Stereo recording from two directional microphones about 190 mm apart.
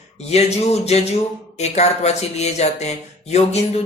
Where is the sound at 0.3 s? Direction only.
35° left (ahead or behind).